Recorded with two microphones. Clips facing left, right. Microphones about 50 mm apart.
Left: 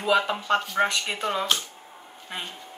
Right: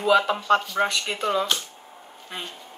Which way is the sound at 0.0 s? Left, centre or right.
Centre.